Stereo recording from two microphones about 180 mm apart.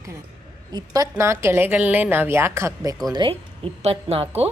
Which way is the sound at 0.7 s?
20° right (ahead or behind).